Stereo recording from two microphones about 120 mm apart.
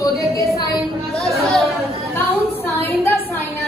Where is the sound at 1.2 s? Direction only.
25° right (ahead or behind).